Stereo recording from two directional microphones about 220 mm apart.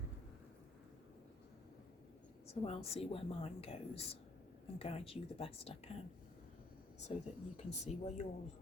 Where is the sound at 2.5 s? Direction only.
25° left (ahead or behind).